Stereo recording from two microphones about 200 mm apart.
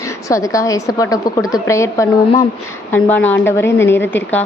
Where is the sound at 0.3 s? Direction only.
15° left (ahead or behind).